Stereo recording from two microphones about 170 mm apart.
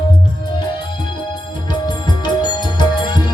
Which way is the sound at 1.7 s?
25° left (ahead or behind).